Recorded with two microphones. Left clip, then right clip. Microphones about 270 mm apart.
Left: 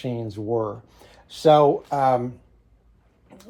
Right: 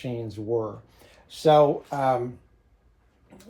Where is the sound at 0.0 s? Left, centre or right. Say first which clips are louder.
Left 3 dB; left.